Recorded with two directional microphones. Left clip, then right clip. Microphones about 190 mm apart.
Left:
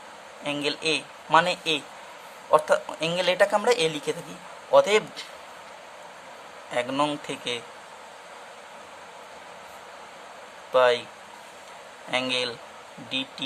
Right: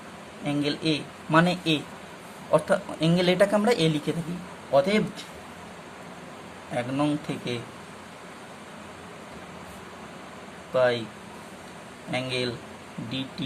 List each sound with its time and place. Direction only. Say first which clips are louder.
0.4 s a woman's voice: left 1 dB; 25° left (ahead or behind)
4.7 s speech: left 3 dB; 30° left (ahead or behind)
6.7 s speech: left 2 dB; 30° left (ahead or behind)
10.8 s speech: left 3 dB; 30° left (ahead or behind)
12.1 s speech: left 3 dB; 25° left (ahead or behind)